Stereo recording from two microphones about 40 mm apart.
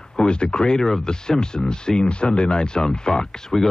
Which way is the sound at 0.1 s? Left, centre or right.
Left.